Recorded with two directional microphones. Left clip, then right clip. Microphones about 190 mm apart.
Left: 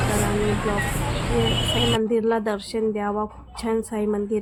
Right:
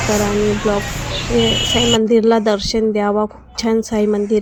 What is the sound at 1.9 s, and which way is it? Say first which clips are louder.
A woman's voice: right 8 dB; 25° right (ahead or behind).